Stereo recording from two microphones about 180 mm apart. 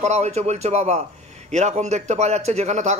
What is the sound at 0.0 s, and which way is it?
A man's voice, 40° right (ahead or behind).